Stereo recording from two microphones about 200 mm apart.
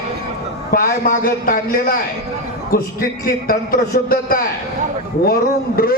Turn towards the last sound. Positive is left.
turn(degrees=50)  # may be behind; listen again after turning